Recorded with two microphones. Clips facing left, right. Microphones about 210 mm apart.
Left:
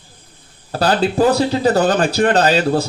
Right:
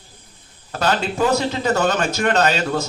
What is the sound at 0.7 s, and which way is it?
Speech, 35° left (ahead or behind).